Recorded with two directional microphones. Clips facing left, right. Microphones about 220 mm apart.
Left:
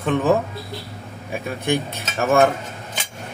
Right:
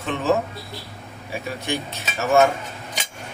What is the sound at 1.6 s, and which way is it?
Cutlery, 55° left (ahead or behind).